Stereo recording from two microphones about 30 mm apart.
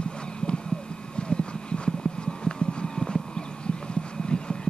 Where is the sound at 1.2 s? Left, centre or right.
Left.